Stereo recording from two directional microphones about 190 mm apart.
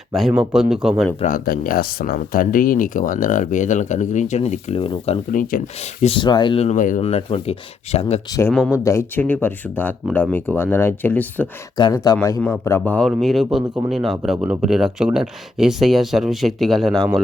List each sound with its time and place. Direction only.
0.1 s speech: centre (ahead or behind)
1.2 s speech: 45° left (ahead or behind); by 5.2 s 30° left (ahead or behind)
5.3 s speech: 45° left (ahead or behind)
6.0 s speech: 30° left (ahead or behind)
8.7 s speech: 15° left (ahead or behind)
11.8 s speech: 20° left (ahead or behind)
12.1 s speech: 10° left (ahead or behind)